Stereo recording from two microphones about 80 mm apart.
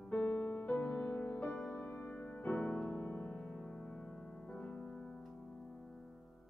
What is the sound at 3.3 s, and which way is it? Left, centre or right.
Music, centre.